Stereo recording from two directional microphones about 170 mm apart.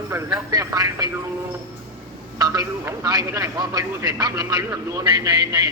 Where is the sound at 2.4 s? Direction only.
20° right (ahead or behind).